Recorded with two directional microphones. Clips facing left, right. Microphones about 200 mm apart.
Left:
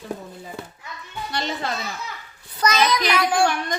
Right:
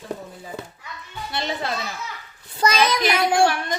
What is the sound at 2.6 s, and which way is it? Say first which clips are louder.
Speech: right 1 dB; 25° right (ahead or behind).